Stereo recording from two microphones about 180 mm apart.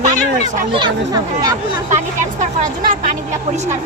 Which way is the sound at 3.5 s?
40° right (ahead or behind).